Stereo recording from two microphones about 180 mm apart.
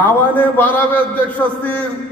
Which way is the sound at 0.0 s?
10° left (ahead or behind).